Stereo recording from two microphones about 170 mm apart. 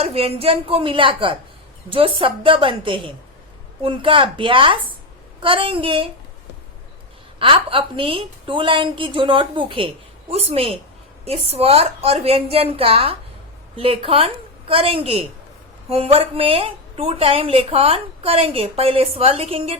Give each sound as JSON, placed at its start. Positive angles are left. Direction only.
{"t": 0.0, "sound": "speech", "side_deg": -35}
{"t": 7.3, "sound": "speech", "side_deg": -30}